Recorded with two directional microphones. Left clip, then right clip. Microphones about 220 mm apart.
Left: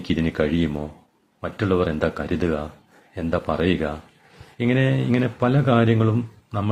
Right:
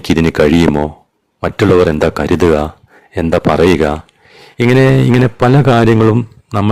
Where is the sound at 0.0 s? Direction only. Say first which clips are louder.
Right 12 dB; 50° right (ahead or behind).